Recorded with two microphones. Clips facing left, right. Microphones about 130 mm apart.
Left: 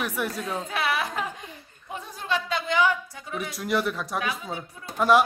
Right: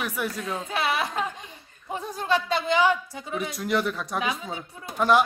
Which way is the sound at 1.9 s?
35° right (ahead or behind).